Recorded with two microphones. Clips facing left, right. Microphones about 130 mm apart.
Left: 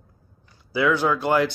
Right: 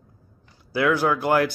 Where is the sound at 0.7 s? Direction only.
10° right (ahead or behind).